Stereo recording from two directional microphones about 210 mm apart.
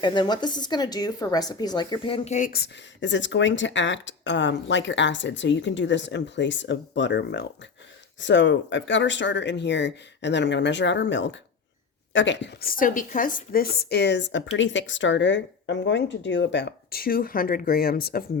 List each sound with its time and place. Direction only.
0.0 s speech: 20° left (ahead or behind); by 18.3 s 45° left (ahead or behind)